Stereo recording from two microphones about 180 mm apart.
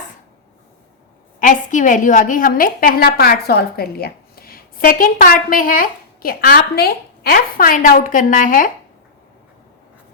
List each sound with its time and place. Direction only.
1.4 s a woman's voice: 45° left (ahead or behind)